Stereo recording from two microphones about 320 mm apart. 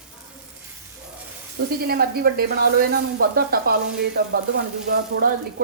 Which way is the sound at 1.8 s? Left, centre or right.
Right.